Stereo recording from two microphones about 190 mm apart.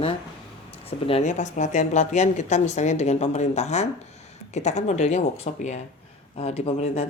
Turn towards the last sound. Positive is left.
turn(degrees=35)  # may be behind; listen again after turning